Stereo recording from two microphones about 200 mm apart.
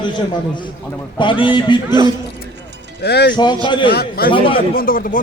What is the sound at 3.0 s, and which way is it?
Speech, 55° left (ahead or behind).